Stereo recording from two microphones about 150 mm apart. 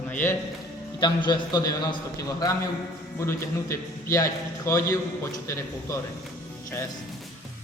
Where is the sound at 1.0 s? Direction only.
30° left (ahead or behind).